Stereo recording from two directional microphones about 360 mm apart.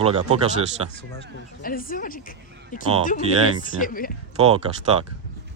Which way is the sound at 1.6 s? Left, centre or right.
Left.